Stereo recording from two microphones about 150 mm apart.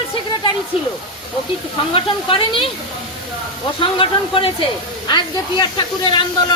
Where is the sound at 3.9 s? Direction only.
35° left (ahead or behind).